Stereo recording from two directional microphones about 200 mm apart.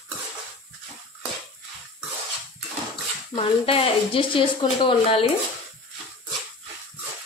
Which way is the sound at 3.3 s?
30° left (ahead or behind).